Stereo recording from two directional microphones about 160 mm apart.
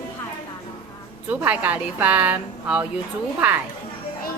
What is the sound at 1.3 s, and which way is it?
A woman's voice, 10° right (ahead or behind).